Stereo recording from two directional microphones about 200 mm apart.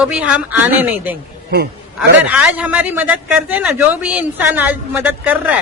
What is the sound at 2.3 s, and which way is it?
A man's voice, 5° right (ahead or behind).